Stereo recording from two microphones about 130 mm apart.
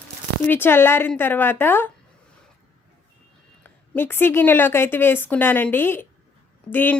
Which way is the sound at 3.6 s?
15° left (ahead or behind).